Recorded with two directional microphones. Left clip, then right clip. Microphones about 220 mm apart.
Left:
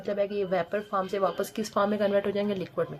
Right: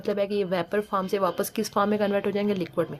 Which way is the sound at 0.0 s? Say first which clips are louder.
Right 2 dB; 40° right (ahead or behind).